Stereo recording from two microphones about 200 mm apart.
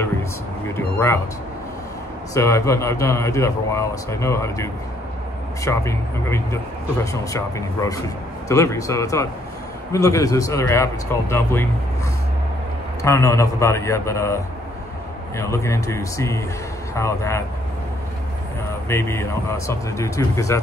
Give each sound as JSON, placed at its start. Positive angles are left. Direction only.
{"t": 0.7, "sound": "a man's voice", "side_deg": 10}
{"t": 2.3, "sound": "a man's voice", "side_deg": 15}
{"t": 13.0, "sound": "a man's voice", "side_deg": 15}
{"t": 18.9, "sound": "a man's voice", "side_deg": 15}